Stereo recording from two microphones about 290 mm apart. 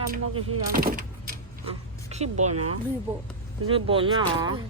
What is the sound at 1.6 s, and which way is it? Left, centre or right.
Speech, centre.